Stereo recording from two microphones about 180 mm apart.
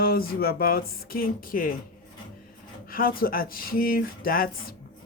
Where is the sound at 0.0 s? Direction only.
55° left (ahead or behind).